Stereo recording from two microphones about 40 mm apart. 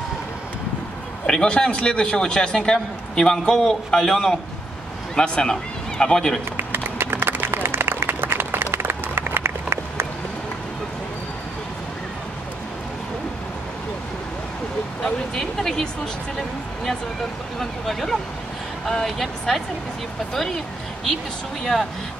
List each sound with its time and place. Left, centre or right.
1.2 s a man's voice: centre
5.1 s a man's voice: left
6.5 s applause: right
15.0 s a sound: centre
17.6 s speech: centre